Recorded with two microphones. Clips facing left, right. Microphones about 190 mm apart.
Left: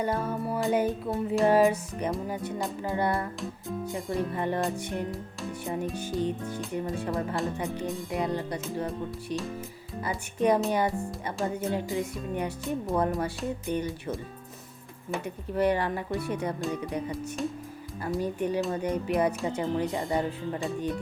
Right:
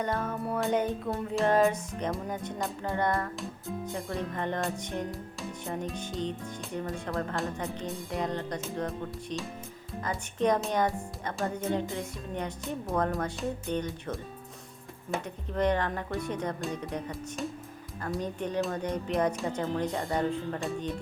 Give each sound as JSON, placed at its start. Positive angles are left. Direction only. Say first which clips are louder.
{"t": 0.0, "sound": "music", "louder": "left 2 dB", "side_deg": 5}
{"t": 13.4, "sound": "speech", "louder": "left 1 dB", "side_deg": 5}
{"t": 15.2, "sound": "music", "louder": "left 3 dB", "side_deg": 10}